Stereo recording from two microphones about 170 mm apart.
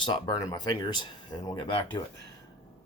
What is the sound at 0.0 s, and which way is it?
Speech, 25° left (ahead or behind).